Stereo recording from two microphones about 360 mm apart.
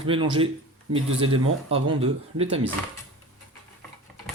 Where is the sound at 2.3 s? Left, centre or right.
Centre.